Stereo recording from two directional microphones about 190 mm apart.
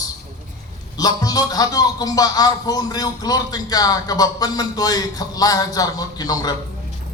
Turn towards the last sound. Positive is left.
turn(degrees=20)  # may be behind; listen again after turning